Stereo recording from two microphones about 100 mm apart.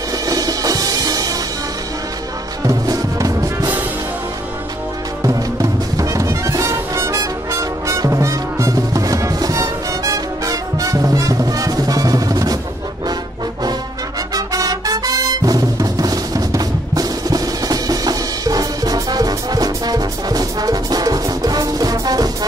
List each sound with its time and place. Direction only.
0.3 s music: 40° right (ahead or behind)
2.6 s music: 35° right (ahead or behind)
5.2 s music: 35° right (ahead or behind)
14.3 s music: 35° right (ahead or behind)